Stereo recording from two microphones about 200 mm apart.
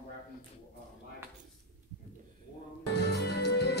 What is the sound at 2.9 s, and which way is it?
Music, 60° left (ahead or behind).